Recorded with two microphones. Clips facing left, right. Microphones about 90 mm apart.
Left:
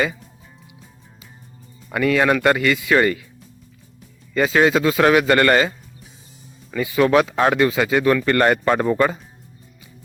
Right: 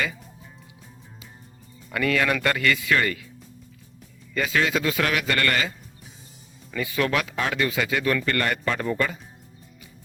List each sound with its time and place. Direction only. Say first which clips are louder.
1.9 s speech: left 6 dB; 25° left (ahead or behind)
4.4 s speech: left 7 dB; 30° left (ahead or behind)